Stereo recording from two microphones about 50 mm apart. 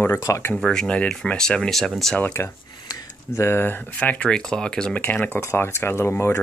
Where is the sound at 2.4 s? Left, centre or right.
Left.